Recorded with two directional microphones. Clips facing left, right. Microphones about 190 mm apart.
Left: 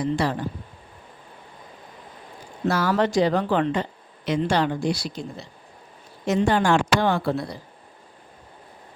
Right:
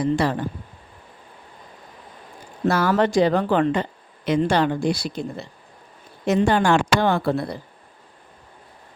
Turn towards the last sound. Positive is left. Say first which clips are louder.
# right 2 dB
turn(degrees=-55)  # may be behind; listen again after turning